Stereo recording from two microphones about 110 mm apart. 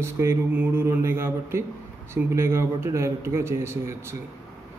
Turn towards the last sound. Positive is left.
turn(degrees=-25)  # may be behind; listen again after turning